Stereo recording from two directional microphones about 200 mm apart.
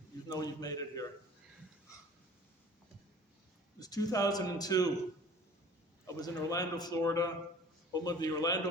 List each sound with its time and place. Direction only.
0.3 s a man's voice: 20° left (ahead or behind)
3.8 s a man's voice: 20° left (ahead or behind)
6.1 s a man's voice: 20° left (ahead or behind)